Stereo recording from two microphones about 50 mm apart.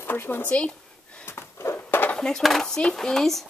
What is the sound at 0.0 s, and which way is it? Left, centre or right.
Speech, left.